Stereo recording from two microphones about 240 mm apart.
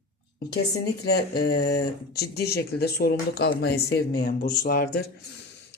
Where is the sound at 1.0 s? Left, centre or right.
Left.